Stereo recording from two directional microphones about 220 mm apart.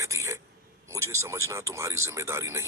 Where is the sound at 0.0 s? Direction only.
15° right (ahead or behind).